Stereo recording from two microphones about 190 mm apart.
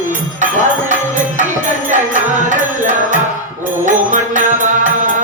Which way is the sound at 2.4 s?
40° right (ahead or behind).